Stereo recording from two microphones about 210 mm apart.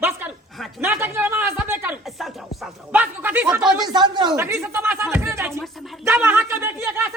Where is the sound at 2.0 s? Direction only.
Centre (ahead or behind).